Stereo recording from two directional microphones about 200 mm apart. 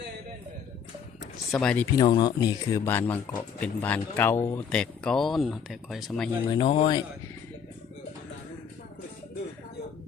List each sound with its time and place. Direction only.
1.5 s speech: 5° left (ahead or behind)
2.0 s speech: 20° left (ahead or behind); by 6.3 s centre (ahead or behind)
6.5 s speech: 25° left (ahead or behind)